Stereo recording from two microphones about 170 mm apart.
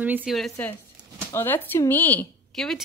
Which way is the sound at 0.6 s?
10° left (ahead or behind).